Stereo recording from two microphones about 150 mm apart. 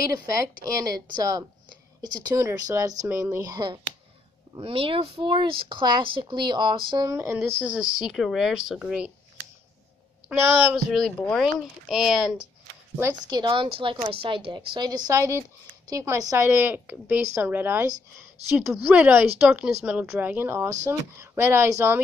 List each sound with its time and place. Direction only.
0.7 s speech: 25° right (ahead or behind)
7.1 s speech: 15° right (ahead or behind)
10.2 s speech: 5° right (ahead or behind)
13.3 s speech: 30° right (ahead or behind); by 22.0 s 15° right (ahead or behind)